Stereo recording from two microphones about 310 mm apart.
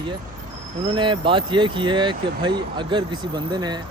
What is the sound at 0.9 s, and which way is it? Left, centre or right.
Speech, centre.